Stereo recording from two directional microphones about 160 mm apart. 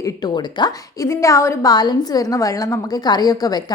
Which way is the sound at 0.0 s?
25° left (ahead or behind).